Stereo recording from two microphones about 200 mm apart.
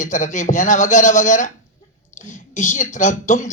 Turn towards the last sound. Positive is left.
turn(degrees=40)  # may be behind; listen again after turning